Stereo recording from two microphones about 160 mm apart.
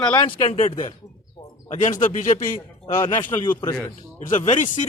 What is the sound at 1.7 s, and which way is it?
A man's voice, 45° left (ahead or behind).